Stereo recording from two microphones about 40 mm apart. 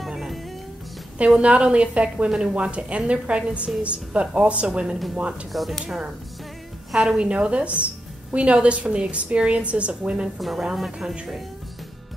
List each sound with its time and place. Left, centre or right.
1.4 s speech: right
2.2 s a woman's voice: centre
2.5 s a woman's voice: right
5.5 s a woman's voice: centre
7.2 s a woman's voice: right
10.4 s a woman's voice: centre